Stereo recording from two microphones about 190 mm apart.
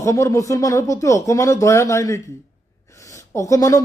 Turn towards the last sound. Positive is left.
turn(degrees=15)  # may be behind; listen again after turning